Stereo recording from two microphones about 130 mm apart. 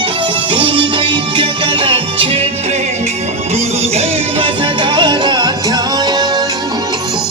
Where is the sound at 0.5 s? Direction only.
40° right (ahead or behind).